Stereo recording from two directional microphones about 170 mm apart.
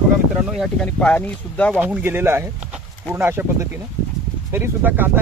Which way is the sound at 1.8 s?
10° right (ahead or behind).